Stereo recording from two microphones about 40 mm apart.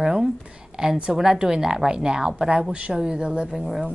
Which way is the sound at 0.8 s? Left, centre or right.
Right.